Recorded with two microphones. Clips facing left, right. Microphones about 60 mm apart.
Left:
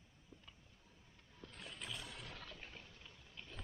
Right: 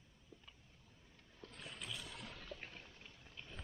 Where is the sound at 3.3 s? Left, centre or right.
Centre.